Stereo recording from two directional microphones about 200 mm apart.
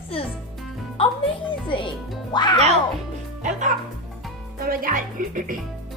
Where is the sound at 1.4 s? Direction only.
25° left (ahead or behind).